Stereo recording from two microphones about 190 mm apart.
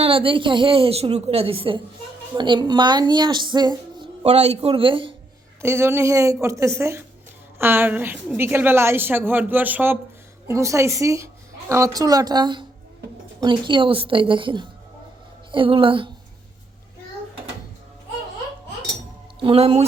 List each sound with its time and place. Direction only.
0.0 s a woman's voice: 30° right (ahead or behind)
5.6 s a woman's voice: 15° right (ahead or behind)
19.4 s speech: 30° right (ahead or behind)